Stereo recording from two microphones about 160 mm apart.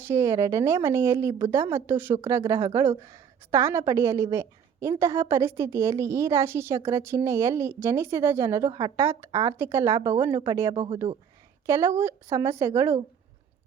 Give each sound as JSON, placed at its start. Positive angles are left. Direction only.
{"t": 0.0, "sound": "a woman's voice", "side_deg": -15}